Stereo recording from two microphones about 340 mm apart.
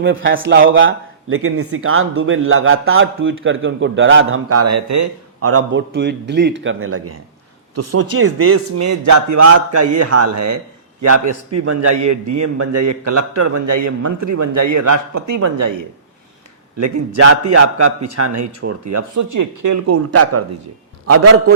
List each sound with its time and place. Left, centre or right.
0.0 s a man's voice: right
17.2 s speech: right
18.9 s a man's voice: right